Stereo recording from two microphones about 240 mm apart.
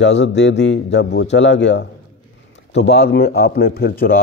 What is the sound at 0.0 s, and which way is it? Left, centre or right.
A man's voice, left.